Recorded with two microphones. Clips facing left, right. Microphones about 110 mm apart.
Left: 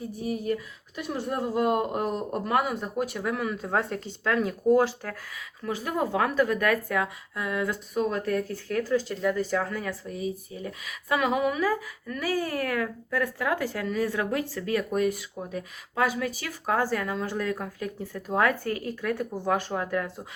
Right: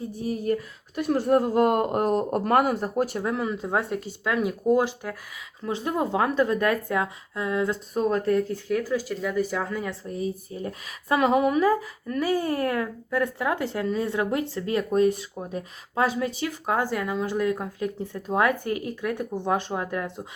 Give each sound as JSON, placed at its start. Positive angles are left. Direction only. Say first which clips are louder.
{"t": 0.2, "sound": "speech", "louder": "right 3 dB", "side_deg": -40}
{"t": 2.8, "sound": "speech", "louder": "right 4 dB", "side_deg": -35}
{"t": 8.7, "sound": "speech", "louder": "even", "side_deg": -10}
{"t": 10.1, "sound": "speech", "louder": "right 2 dB", "side_deg": -40}